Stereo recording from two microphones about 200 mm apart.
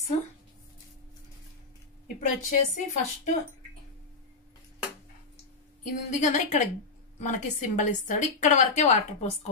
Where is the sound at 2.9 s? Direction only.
40° left (ahead or behind).